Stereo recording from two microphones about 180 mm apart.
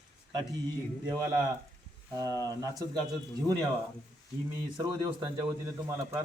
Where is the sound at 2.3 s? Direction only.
20° left (ahead or behind).